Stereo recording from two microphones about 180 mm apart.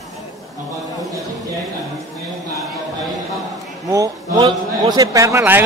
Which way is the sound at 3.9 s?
20° right (ahead or behind).